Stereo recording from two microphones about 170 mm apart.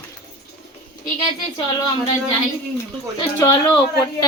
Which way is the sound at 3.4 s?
20° left (ahead or behind).